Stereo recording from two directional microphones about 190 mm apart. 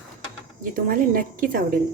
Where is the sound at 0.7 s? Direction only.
50° right (ahead or behind).